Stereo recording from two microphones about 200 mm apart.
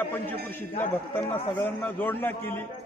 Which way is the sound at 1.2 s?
10° left (ahead or behind).